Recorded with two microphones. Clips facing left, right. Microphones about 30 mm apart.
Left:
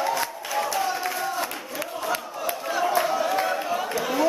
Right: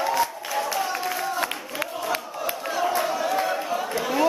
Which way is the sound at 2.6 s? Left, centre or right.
Centre.